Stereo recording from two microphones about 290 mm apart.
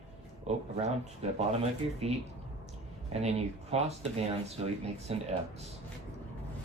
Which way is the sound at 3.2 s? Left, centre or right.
Right.